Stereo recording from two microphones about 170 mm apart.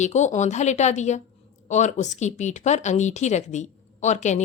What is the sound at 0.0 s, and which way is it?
Speech, 45° left (ahead or behind).